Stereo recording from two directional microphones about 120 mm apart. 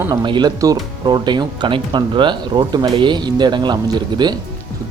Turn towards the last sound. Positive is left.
turn(degrees=-35)  # may be behind; listen again after turning